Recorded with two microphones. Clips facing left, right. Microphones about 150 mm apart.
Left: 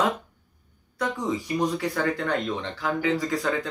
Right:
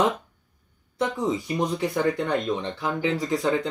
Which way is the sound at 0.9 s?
25° right (ahead or behind).